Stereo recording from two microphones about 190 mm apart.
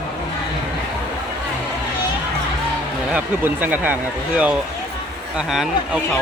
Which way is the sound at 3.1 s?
10° right (ahead or behind).